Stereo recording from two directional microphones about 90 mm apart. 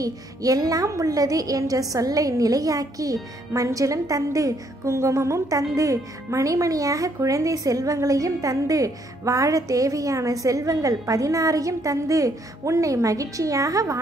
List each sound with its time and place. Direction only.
0.0 s a woman's voice: 40° right (ahead or behind)